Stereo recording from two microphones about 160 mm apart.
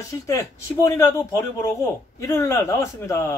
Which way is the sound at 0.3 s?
20° left (ahead or behind).